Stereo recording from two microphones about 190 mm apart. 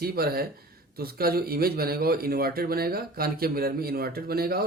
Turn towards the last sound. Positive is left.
turn(degrees=-55)  # may be behind; listen again after turning